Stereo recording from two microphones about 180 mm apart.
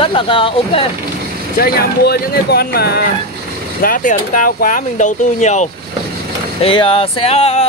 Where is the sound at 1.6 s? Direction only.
55° left (ahead or behind).